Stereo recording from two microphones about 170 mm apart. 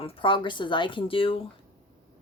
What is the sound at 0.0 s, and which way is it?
Speech, 30° left (ahead or behind).